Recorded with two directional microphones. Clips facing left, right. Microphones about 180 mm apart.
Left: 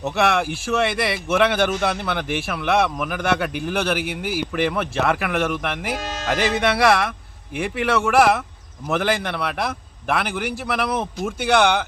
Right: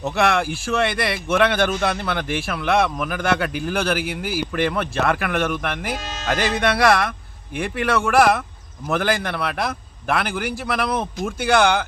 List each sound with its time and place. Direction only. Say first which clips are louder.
0.0 s speech: even; centre (ahead or behind)
6.0 s speech: left 3 dB; 70° left (ahead or behind)
6.2 s speech: even; 5° left (ahead or behind)